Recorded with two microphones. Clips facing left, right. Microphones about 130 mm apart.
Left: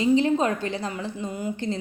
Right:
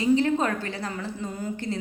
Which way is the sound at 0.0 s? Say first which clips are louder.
Left 2 dB; 20° left (ahead or behind).